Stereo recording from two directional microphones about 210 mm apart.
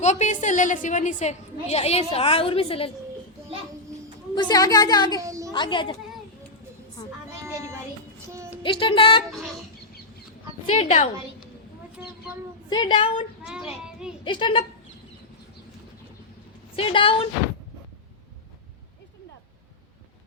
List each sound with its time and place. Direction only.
0.0 s a woman's voice: 35° left (ahead or behind)
4.4 s speech: 20° left (ahead or behind)
5.2 s a sound: 15° right (ahead or behind)
5.5 s speech: 20° left (ahead or behind)
8.3 s a sound: 15° right (ahead or behind)
8.6 s speech: 25° left (ahead or behind)
10.8 s a woman's voice: 30° left (ahead or behind)
12.7 s speech: 20° left (ahead or behind)
13.4 s a child's voice: 5° right (ahead or behind)
14.3 s speech: 25° left (ahead or behind)
16.7 s speech: 25° left (ahead or behind)